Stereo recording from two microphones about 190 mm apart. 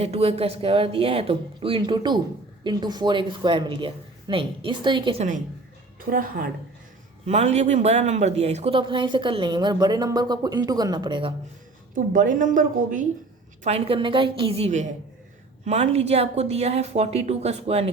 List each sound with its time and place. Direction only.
0.0 s a woman's voice: 30° right (ahead or behind)
6.0 s a woman's voice: 50° right (ahead or behind)
7.3 s speech: 35° right (ahead or behind)
11.9 s a woman's voice: 45° right (ahead or behind)
13.7 s a woman's voice: 30° right (ahead or behind)